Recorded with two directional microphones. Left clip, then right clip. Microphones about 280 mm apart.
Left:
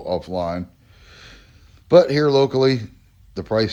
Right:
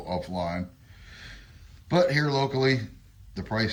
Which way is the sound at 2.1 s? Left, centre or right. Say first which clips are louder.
Left 9 dB; centre.